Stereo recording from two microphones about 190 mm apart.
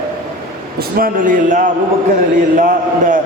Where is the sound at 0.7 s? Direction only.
45° right (ahead or behind).